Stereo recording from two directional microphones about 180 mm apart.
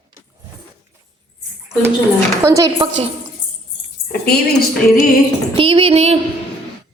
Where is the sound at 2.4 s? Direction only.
20° right (ahead or behind).